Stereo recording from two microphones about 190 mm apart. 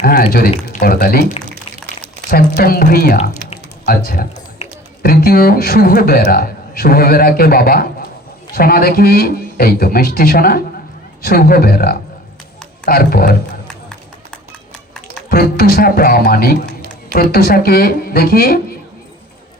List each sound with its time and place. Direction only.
0.0 s speech: 50° left (ahead or behind)
2.3 s speech: 50° left (ahead or behind)
4.6 s a sound: 35° left (ahead or behind)
5.0 s speech: 55° left (ahead or behind)
15.3 s speech: 55° left (ahead or behind)